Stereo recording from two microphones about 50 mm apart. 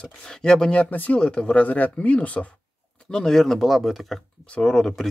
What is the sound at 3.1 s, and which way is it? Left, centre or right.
Speech, centre.